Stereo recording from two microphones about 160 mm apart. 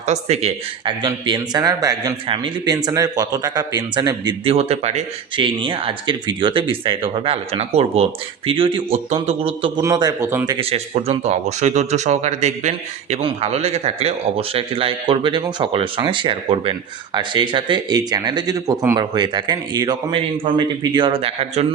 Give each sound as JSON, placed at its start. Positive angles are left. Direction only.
{"t": 0.0, "sound": "speech", "side_deg": -45}
{"t": 0.9, "sound": "speech", "side_deg": -30}
{"t": 4.5, "sound": "speech", "side_deg": -40}
{"t": 5.4, "sound": "speech", "side_deg": -30}
{"t": 10.6, "sound": "speech", "side_deg": -40}